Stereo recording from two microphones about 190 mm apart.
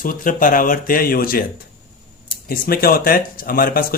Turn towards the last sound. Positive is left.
turn(degrees=50)  # may be behind; listen again after turning